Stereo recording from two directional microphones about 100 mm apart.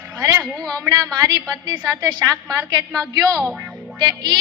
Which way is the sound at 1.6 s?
45° right (ahead or behind).